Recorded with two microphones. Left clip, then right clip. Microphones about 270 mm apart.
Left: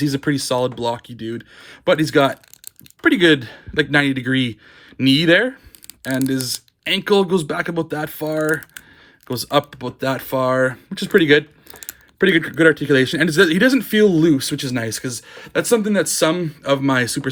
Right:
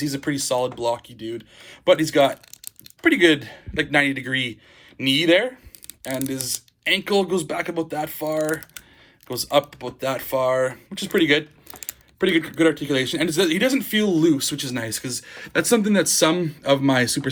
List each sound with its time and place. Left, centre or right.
0.0 s a man's voice: left